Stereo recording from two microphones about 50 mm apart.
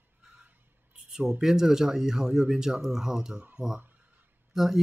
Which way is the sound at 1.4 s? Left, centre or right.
Centre.